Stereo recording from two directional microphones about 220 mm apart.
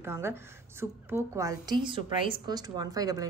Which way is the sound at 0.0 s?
10° right (ahead or behind).